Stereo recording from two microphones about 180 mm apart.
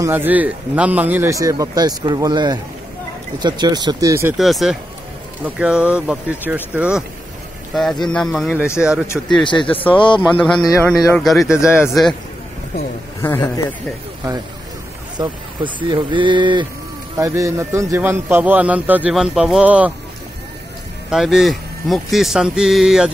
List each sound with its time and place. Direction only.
0.0 s a man's voice: 10° right (ahead or behind)
4.4 s a man's voice: centre (ahead or behind)
9.0 s a man's voice: 15° left (ahead or behind)
9.4 s speech: 25° left (ahead or behind)
11.1 s speech: centre (ahead or behind)
13.2 s a man's voice: 20° left (ahead or behind)
15.1 s speech: 25° right (ahead or behind)
17.2 s a man's voice: 15° right (ahead or behind)
21.1 s speech: centre (ahead or behind)